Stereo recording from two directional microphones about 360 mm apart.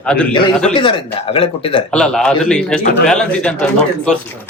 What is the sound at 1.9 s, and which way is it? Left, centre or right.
A man's voice, centre.